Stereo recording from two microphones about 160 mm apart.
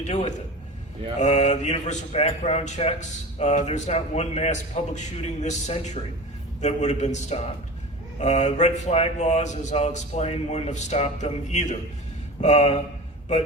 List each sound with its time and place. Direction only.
0.1 s a man's voice: 45° left (ahead or behind)